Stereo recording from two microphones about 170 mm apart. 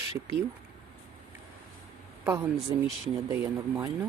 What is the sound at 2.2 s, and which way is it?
Speech, 15° right (ahead or behind).